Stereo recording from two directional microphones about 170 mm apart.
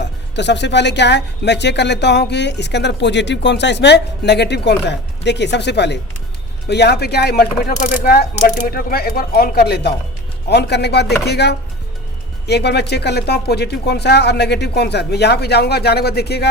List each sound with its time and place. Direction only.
0.0 s speech: 90° left
6.7 s speech: 75° left (ahead or behind)